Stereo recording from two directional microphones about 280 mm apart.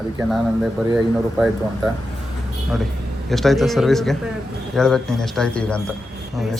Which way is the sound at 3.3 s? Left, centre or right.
Centre.